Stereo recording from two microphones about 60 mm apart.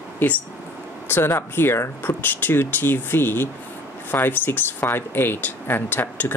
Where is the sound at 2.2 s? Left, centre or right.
Left.